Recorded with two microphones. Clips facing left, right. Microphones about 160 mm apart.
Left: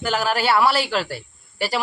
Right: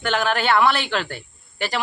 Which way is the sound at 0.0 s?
5° left (ahead or behind).